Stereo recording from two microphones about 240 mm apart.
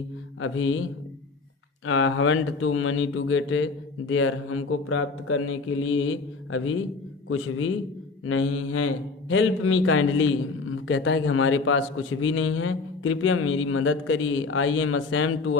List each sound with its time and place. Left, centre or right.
0.3 s a man's voice: left
1.9 s a man's voice: left